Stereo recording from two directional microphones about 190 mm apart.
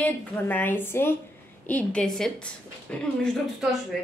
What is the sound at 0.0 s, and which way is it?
A woman's voice, 10° left (ahead or behind).